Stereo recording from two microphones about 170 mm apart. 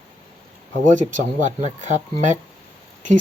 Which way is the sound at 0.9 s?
45° right (ahead or behind).